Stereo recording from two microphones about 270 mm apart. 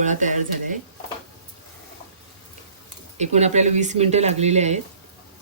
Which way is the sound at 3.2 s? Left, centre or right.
Right.